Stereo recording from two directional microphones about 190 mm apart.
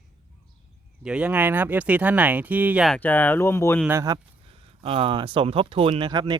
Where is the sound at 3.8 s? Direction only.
15° right (ahead or behind).